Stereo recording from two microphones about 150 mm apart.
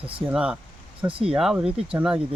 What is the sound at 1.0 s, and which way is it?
Speech, 35° right (ahead or behind).